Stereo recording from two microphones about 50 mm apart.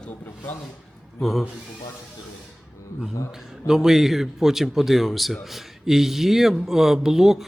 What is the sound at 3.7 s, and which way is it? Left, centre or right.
Speech, centre.